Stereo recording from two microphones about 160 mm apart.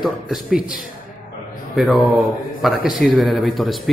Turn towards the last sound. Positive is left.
turn(degrees=0)  # may be behind; listen again after turning